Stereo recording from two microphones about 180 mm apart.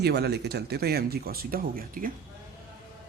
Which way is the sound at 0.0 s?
65° right (ahead or behind).